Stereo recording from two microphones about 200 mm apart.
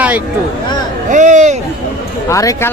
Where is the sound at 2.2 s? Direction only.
15° left (ahead or behind).